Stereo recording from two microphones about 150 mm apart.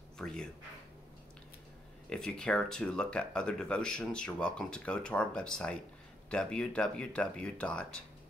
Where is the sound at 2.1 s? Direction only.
5° left (ahead or behind).